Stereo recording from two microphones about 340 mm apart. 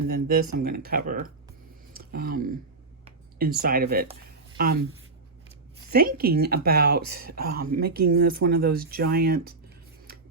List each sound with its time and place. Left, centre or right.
0.1 s speech: right
1.9 s a sound: right
3.0 s speech: right
5.9 s speech: right
7.1 s speech: right
7.3 s speech: right